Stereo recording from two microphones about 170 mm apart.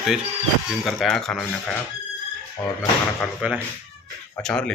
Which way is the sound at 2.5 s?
15° left (ahead or behind).